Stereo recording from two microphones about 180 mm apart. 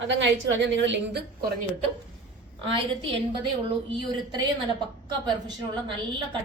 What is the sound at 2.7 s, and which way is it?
Speech, 25° right (ahead or behind).